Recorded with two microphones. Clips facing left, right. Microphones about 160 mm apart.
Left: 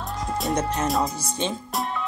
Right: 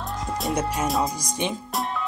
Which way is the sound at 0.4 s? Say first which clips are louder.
Left 1 dB; 5° right (ahead or behind).